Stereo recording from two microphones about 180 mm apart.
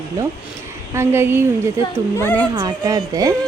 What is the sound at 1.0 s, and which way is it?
Speech, 15° right (ahead or behind).